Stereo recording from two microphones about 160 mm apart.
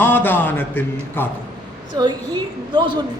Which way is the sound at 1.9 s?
25° right (ahead or behind).